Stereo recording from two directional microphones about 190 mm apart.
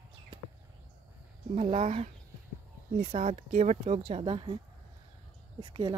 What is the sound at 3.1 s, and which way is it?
Speech, 35° right (ahead or behind).